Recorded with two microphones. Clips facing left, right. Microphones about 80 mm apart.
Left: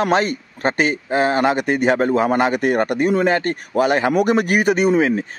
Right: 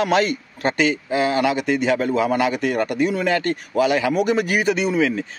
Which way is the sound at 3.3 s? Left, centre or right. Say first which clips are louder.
Left 2 dB; left.